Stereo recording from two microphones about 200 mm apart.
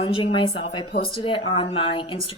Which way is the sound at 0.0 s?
25° left (ahead or behind).